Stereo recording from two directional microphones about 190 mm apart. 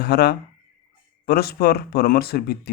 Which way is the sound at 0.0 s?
55° left (ahead or behind).